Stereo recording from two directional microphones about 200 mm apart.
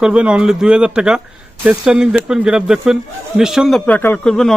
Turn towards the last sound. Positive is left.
turn(degrees=5)  # may be behind; listen again after turning